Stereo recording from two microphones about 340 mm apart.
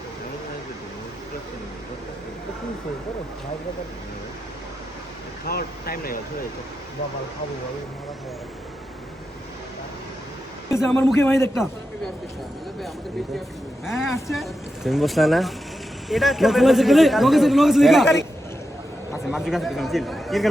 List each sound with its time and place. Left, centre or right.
5.5 s speech: left
10.7 s a man's voice: centre
13.8 s a man's voice: centre
19.3 s a man's voice: centre